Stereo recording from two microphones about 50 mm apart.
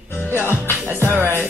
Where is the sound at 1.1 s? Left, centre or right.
Right.